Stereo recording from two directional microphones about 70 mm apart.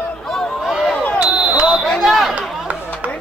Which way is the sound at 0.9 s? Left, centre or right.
Centre.